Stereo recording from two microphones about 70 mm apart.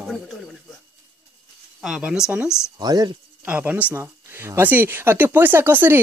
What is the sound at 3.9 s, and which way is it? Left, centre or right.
Speech, right.